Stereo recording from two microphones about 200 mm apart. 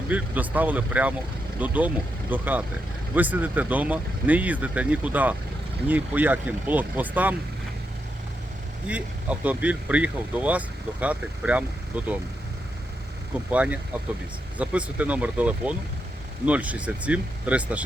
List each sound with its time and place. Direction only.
0.1 s speech: 10° right (ahead or behind)
8.9 s speech: 5° right (ahead or behind)
13.5 s speech: 5° right (ahead or behind)